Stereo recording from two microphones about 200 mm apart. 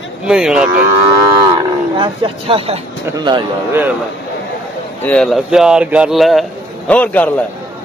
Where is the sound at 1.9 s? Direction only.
25° right (ahead or behind).